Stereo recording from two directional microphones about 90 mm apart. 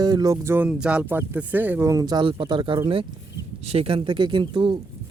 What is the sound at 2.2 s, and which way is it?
Speech, 65° right (ahead or behind).